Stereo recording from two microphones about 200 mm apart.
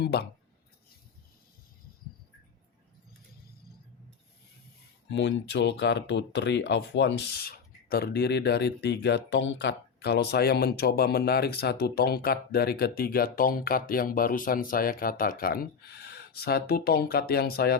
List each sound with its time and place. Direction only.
0.0 s speech: 55° left (ahead or behind)
5.0 s speech: 65° left (ahead or behind)